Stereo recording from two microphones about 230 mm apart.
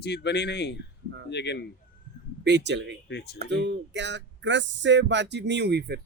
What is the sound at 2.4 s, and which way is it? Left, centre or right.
Speech, right.